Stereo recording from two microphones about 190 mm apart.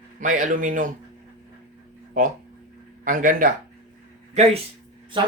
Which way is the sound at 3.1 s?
45° right (ahead or behind).